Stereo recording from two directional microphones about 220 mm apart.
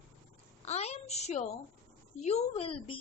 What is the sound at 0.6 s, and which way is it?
A woman's voice, 30° left (ahead or behind).